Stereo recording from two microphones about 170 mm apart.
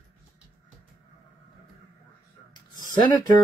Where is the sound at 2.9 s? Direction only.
25° left (ahead or behind).